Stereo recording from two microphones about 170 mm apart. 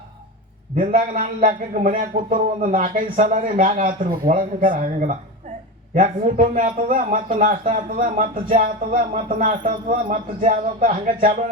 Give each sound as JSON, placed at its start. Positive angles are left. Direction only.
{"t": 0.8, "sound": "a man's voice", "side_deg": -50}